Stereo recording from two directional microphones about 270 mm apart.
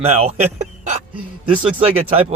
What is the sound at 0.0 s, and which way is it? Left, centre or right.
Speech, right.